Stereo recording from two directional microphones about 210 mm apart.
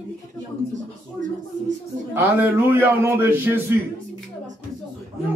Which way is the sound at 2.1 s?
10° right (ahead or behind).